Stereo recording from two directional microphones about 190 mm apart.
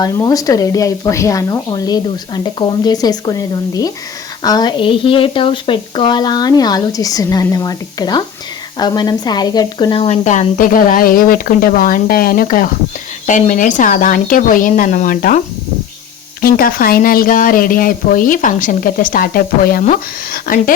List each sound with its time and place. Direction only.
0.0 s speech: 15° left (ahead or behind)
10.2 s speech: 45° left (ahead or behind)
16.4 s speech: 50° left (ahead or behind)